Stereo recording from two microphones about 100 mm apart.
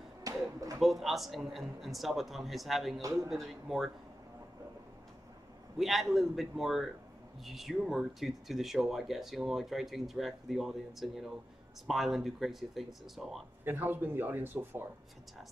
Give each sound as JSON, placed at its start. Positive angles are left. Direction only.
{"t": 0.2, "sound": "a sound", "side_deg": -35}
{"t": 0.7, "sound": "speech", "side_deg": 0}
{"t": 3.0, "sound": "a man's voice", "side_deg": -35}
{"t": 3.3, "sound": "speech", "side_deg": 0}
{"t": 5.8, "sound": "speech", "side_deg": 0}
{"t": 13.7, "sound": "a man's voice", "side_deg": -20}